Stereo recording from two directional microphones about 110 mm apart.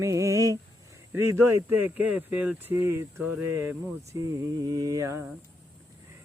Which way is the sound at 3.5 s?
20° right (ahead or behind).